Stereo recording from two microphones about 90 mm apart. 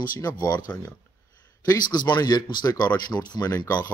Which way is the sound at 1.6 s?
45° left (ahead or behind).